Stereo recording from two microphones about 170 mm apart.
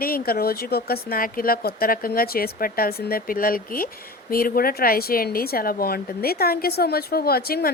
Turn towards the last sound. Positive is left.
turn(degrees=65)  # may be behind; listen again after turning